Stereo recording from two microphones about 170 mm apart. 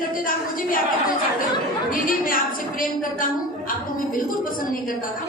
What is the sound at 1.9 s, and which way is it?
A woman's voice, 55° left (ahead or behind).